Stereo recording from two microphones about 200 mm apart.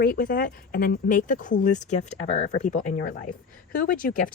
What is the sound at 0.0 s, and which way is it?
A woman's voice, 45° left (ahead or behind).